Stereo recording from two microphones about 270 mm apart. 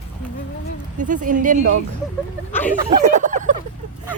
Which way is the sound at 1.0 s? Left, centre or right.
Right.